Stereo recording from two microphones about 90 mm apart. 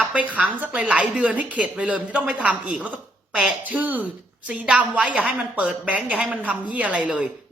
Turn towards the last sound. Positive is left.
turn(degrees=-15)  # may be behind; listen again after turning